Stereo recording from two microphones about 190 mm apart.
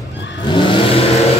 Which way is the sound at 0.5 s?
25° left (ahead or behind).